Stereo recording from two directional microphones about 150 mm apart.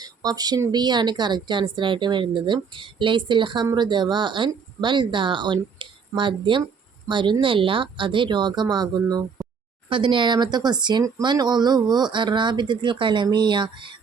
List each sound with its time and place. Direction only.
0.0 s a woman's voice: 25° right (ahead or behind)